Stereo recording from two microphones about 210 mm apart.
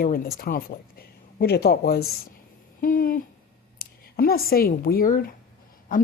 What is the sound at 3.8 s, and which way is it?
A woman's voice, 45° left (ahead or behind).